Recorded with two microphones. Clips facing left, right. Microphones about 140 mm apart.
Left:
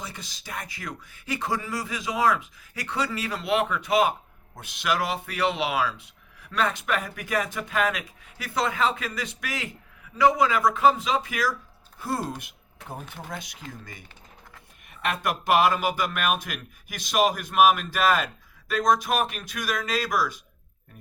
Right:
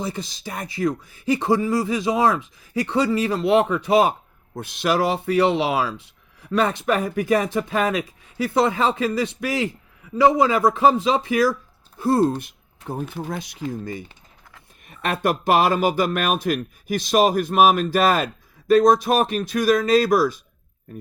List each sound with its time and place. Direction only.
0.0 s speech: 35° right (ahead or behind)
15.2 s speech: 35° right (ahead or behind)